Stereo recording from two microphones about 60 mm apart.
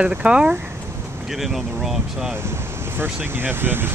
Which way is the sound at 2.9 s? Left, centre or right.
Right.